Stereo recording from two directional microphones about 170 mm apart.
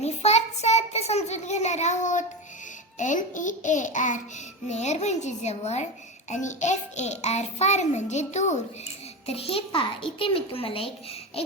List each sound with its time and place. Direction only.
0.0 s a child's voice: 40° left (ahead or behind)